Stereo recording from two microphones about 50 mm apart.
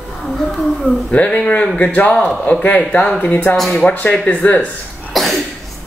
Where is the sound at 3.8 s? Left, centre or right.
Left.